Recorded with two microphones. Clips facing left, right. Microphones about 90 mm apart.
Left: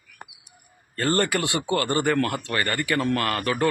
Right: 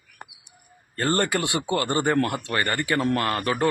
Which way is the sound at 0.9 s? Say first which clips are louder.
Even; 20° right (ahead or behind).